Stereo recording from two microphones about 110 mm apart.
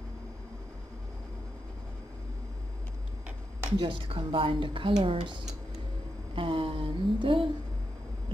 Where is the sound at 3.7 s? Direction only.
50° right (ahead or behind).